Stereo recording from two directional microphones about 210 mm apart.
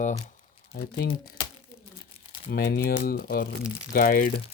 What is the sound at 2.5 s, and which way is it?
Speech, 50° left (ahead or behind).